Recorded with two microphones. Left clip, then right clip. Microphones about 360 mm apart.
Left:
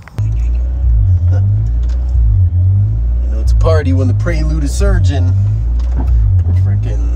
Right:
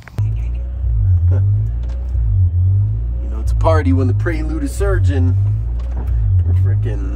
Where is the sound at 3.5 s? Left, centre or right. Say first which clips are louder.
Left 1 dB; right.